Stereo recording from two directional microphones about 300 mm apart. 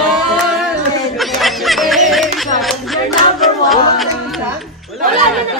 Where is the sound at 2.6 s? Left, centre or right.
Centre.